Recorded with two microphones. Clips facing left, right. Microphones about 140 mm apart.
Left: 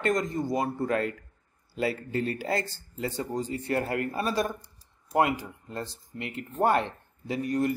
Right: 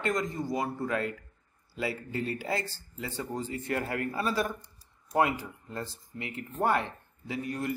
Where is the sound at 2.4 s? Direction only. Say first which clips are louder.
Left 3 dB; 40° left (ahead or behind).